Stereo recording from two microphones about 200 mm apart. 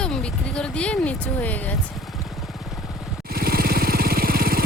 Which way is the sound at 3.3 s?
50° right (ahead or behind).